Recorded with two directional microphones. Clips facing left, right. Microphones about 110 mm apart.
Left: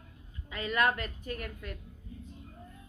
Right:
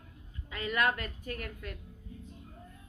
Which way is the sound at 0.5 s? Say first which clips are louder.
Left 1 dB; 25° left (ahead or behind).